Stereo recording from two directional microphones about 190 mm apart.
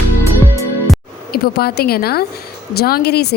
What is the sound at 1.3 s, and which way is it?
A woman's voice, 55° left (ahead or behind).